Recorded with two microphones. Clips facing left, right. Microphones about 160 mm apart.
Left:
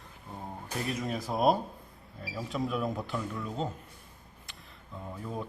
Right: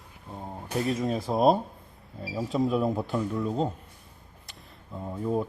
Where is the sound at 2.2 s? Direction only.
30° right (ahead or behind).